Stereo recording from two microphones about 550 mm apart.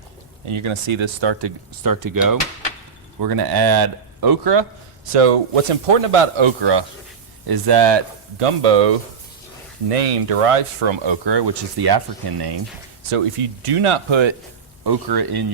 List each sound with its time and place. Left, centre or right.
0.4 s speech: right
5.1 s speech: right
8.4 s speech: right
13.7 s speech: right
14.8 s speech: right